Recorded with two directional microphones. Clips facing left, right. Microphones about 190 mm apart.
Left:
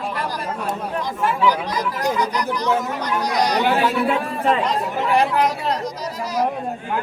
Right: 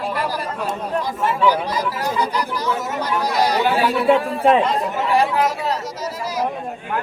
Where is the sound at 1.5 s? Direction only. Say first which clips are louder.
Right 2 dB; 10° right (ahead or behind).